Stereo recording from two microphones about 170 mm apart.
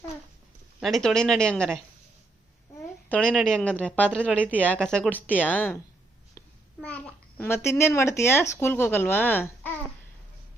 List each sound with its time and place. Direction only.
0.8 s speech: centre (ahead or behind)
3.1 s a child's voice: 5° left (ahead or behind)
6.8 s a child's voice: 10° left (ahead or behind)